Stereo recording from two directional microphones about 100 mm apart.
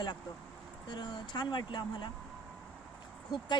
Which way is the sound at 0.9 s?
50° left (ahead or behind).